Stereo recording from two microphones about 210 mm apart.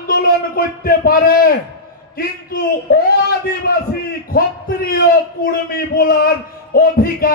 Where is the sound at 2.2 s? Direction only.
45° left (ahead or behind).